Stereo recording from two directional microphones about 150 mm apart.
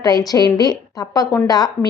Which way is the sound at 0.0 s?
25° left (ahead or behind).